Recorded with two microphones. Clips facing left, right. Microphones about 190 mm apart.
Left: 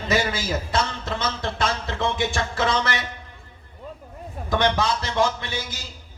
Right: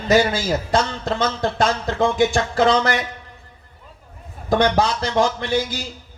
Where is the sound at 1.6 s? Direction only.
40° right (ahead or behind).